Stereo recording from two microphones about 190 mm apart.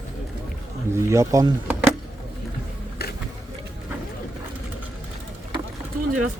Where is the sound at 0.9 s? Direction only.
15° right (ahead or behind).